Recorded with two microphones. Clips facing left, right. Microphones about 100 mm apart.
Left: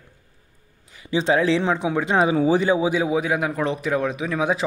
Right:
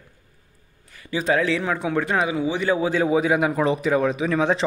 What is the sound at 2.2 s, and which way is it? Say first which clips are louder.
Speech: left 5 dB; 35° left (ahead or behind).